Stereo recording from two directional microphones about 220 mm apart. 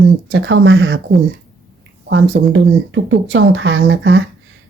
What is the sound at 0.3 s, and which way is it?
Speech, 55° right (ahead or behind).